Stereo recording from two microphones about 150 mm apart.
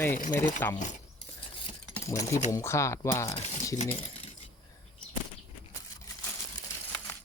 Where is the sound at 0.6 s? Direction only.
15° left (ahead or behind).